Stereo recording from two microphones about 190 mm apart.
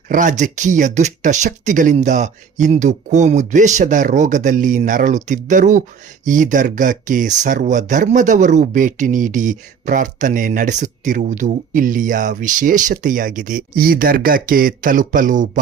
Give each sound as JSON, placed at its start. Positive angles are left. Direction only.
{"t": 0.1, "sound": "speech", "side_deg": -40}